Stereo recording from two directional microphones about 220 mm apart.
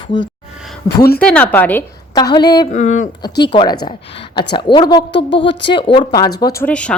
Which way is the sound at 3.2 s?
20° left (ahead or behind).